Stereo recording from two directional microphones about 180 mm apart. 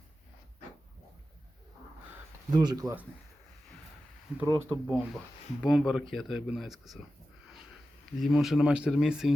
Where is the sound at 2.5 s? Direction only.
25° right (ahead or behind).